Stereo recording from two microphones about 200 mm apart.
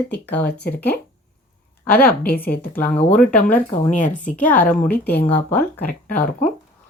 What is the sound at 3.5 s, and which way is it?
Speech, 40° left (ahead or behind).